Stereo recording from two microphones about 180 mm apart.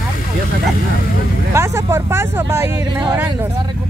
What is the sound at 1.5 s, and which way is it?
Speech, 15° right (ahead or behind).